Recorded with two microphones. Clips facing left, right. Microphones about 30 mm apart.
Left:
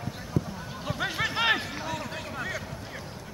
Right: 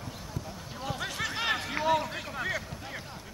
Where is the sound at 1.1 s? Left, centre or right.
Centre.